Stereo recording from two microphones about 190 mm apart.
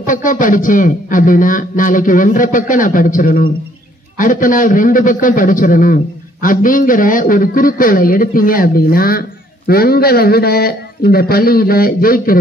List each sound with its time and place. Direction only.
0.0 s a man's voice: 45° left (ahead or behind)